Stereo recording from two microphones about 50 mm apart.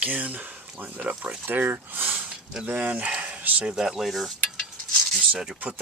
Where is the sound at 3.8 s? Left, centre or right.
Centre.